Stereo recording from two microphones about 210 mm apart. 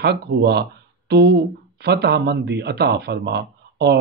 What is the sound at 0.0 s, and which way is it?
Speech, 50° right (ahead or behind).